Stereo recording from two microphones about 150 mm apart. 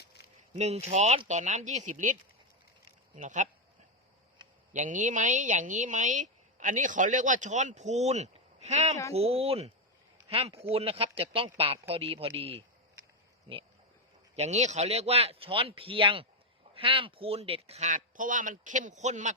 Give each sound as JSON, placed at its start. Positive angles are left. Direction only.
{"t": 0.5, "sound": "speech", "side_deg": -45}
{"t": 3.2, "sound": "a woman's voice", "side_deg": -55}
{"t": 4.7, "sound": "a woman's voice", "side_deg": -55}
{"t": 14.3, "sound": "speech", "side_deg": -50}